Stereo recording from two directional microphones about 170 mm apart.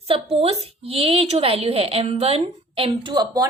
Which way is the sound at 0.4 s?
35° right (ahead or behind).